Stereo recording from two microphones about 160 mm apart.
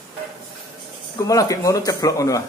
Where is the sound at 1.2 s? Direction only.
20° left (ahead or behind).